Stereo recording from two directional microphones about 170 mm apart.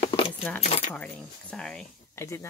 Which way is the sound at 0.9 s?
5° left (ahead or behind).